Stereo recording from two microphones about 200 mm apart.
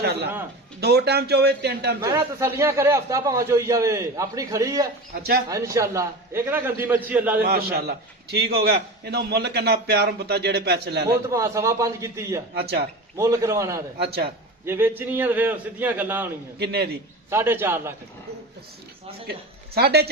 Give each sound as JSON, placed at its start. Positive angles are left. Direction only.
{"t": 0.0, "sound": "a man's voice", "side_deg": -55}
{"t": 2.0, "sound": "a man's voice", "side_deg": -15}
{"t": 5.1, "sound": "a man's voice", "side_deg": -50}
{"t": 5.5, "sound": "a man's voice", "side_deg": -15}
{"t": 7.4, "sound": "a man's voice", "side_deg": -50}
{"t": 11.3, "sound": "a man's voice", "side_deg": -15}
{"t": 12.5, "sound": "a man's voice", "side_deg": -55}
{"t": 13.1, "sound": "a man's voice", "side_deg": -15}
{"t": 16.6, "sound": "a man's voice", "side_deg": -55}
{"t": 17.2, "sound": "a man's voice", "side_deg": -10}
{"t": 19.3, "sound": "speech", "side_deg": -50}